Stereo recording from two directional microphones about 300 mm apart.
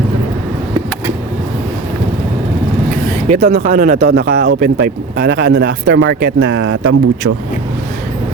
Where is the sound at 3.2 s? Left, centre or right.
Right.